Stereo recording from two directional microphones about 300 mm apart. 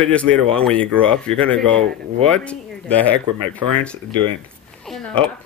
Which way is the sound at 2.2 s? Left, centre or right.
Centre.